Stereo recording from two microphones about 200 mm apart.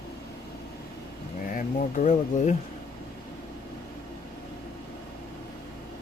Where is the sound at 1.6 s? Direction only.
35° left (ahead or behind).